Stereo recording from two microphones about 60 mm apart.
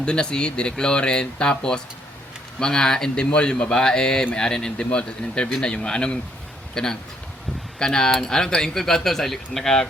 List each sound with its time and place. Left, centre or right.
0.0 s speech: centre